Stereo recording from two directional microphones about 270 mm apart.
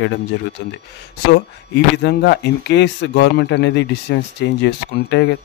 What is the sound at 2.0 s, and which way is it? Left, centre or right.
A man's voice, left.